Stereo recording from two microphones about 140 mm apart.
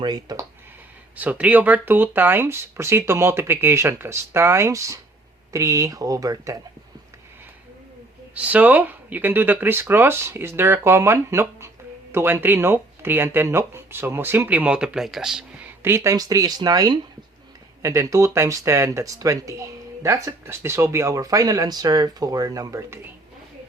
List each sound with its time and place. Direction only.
0.0 s speech: 30° right (ahead or behind)
1.1 s speech: 10° right (ahead or behind)
8.4 s speech: 10° right (ahead or behind)
15.8 s speech: 20° right (ahead or behind)